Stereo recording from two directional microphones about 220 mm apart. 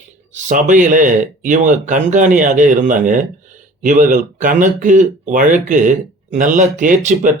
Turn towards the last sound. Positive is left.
turn(degrees=-35)  # may be behind; listen again after turning